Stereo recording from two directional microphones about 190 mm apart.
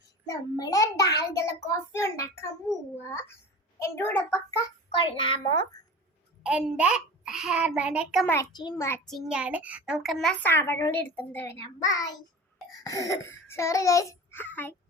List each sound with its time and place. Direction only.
0.3 s a child's voice: 20° left (ahead or behind)
4.9 s a child's voice: 25° left (ahead or behind)
6.4 s a child's voice: 5° right (ahead or behind)
8.3 s a child's voice: 20° left (ahead or behind)
9.0 s a child's voice: centre (ahead or behind)